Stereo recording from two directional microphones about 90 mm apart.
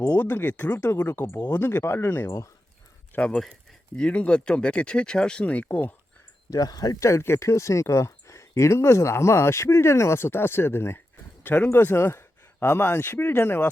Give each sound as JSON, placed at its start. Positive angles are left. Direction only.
{"t": 0.0, "sound": "speech", "side_deg": 20}
{"t": 3.2, "sound": "speech", "side_deg": 15}
{"t": 6.5, "sound": "speech", "side_deg": 45}